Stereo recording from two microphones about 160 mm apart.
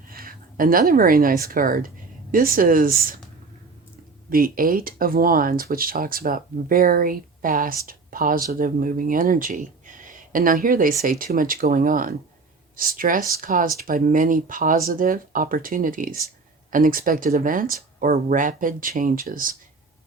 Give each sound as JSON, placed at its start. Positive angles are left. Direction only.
{"t": 0.1, "sound": "speech", "side_deg": -65}
{"t": 4.3, "sound": "speech", "side_deg": -65}